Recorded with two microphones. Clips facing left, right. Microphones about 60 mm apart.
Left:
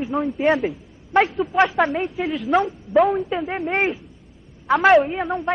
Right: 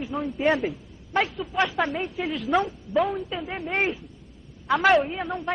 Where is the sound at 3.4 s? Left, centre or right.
Left.